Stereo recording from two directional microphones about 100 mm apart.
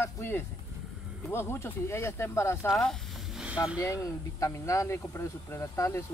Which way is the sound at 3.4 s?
10° right (ahead or behind).